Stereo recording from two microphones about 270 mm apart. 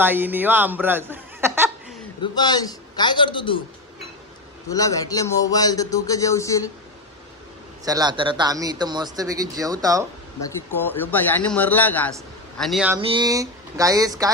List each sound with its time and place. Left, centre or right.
0.0 s a man's voice: centre
2.2 s speech: centre
4.7 s speech: centre
7.9 s speech: centre
10.4 s a man's voice: centre
13.0 s speech: centre